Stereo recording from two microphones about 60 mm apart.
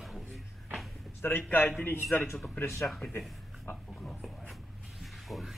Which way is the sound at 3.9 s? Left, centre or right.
Centre.